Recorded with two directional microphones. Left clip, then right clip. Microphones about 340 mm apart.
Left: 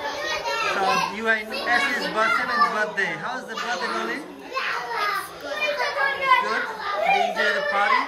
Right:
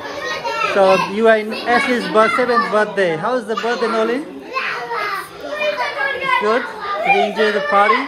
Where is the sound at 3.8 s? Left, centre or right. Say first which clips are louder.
Right 9 dB; left.